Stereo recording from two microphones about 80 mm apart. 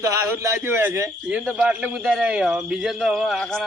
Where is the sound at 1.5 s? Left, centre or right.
Centre.